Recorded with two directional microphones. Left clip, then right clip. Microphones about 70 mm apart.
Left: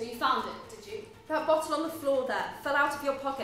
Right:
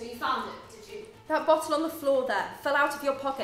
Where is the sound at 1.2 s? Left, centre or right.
Right.